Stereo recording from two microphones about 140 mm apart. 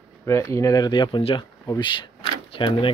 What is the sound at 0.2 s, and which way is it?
Speech, 20° left (ahead or behind).